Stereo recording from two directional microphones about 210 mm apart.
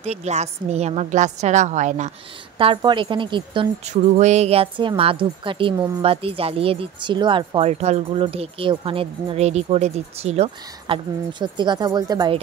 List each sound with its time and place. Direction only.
0.0 s a woman's voice: 30° right (ahead or behind)
2.6 s speech: 25° right (ahead or behind)